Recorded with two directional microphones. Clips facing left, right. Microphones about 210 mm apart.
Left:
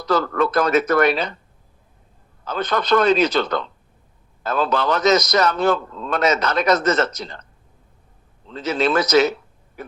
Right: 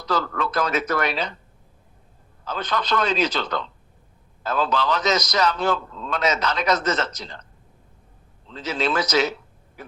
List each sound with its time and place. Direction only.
0.0 s a man's voice: 50° left (ahead or behind)
2.4 s a man's voice: 55° left (ahead or behind)
8.4 s speech: 55° left (ahead or behind)